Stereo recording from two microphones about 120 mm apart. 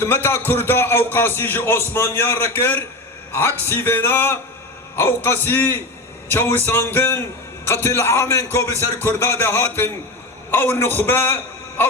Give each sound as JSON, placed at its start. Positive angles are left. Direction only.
{"t": 0.0, "sound": "a man's voice", "side_deg": 20}